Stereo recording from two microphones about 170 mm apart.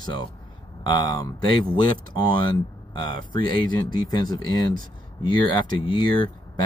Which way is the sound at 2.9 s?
25° left (ahead or behind).